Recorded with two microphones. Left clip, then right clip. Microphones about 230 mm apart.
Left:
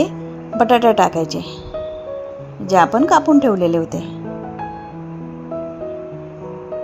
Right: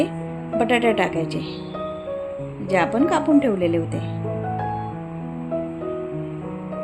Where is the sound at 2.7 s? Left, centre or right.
Left.